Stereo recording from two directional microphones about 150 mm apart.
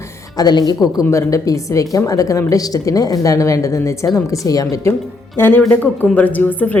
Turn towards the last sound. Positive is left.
turn(degrees=10)  # may be behind; listen again after turning